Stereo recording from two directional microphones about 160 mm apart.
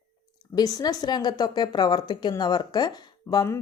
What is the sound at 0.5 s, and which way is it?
Speech, 25° left (ahead or behind).